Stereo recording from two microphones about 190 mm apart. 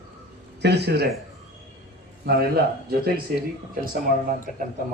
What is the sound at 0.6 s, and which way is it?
Speech, 60° right (ahead or behind).